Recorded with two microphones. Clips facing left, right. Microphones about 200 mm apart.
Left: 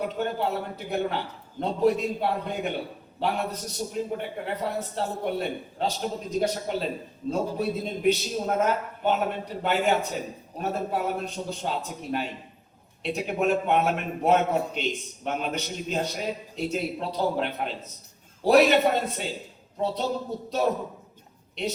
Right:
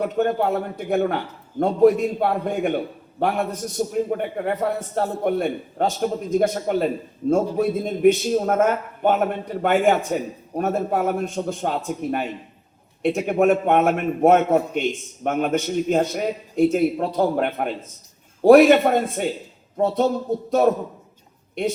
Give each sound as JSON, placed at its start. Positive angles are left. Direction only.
{"t": 0.2, "sound": "a man's voice", "side_deg": -50}
{"t": 21.6, "sound": "a man's voice", "side_deg": -50}